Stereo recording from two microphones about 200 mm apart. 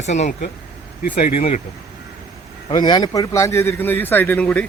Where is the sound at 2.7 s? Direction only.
20° left (ahead or behind).